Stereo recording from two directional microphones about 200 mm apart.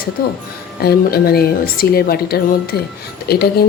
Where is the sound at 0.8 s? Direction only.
50° left (ahead or behind).